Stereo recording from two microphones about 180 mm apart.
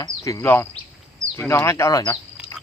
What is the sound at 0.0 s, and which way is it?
Speech, 15° left (ahead or behind).